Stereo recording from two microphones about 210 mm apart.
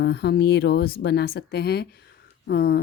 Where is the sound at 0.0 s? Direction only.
50° left (ahead or behind).